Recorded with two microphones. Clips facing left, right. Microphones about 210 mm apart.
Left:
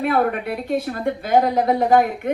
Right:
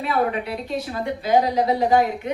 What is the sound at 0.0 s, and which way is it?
A woman's voice, 55° left (ahead or behind).